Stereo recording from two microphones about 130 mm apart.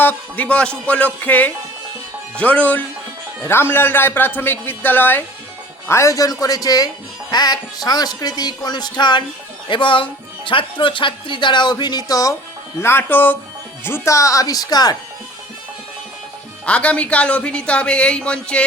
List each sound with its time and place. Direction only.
0.0 s speech: 15° left (ahead or behind); by 12.4 s 30° left (ahead or behind)
12.8 s speech: 15° left (ahead or behind)
16.6 s speech: 10° left (ahead or behind)